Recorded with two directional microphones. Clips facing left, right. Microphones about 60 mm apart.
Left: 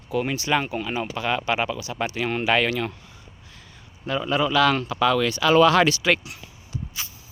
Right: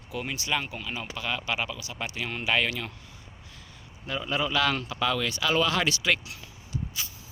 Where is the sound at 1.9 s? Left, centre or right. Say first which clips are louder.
Left 9 dB; left.